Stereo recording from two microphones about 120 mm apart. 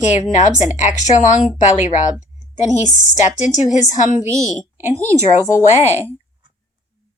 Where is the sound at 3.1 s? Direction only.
90° left.